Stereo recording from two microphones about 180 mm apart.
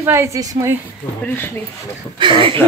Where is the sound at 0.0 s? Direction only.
15° right (ahead or behind).